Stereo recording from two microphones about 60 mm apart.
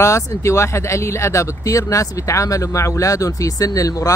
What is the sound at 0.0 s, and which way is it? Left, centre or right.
Speech, left.